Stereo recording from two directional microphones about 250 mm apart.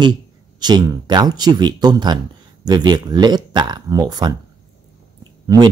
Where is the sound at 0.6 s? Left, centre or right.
Centre.